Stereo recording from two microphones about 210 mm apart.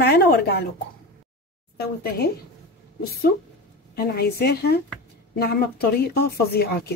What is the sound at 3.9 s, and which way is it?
Speech, 50° left (ahead or behind).